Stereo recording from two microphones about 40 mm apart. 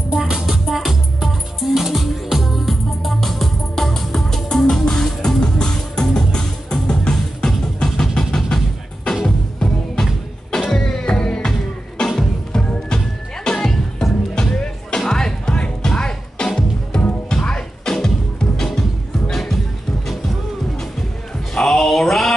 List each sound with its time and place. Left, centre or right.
0.1 s music: centre
21.6 s music: centre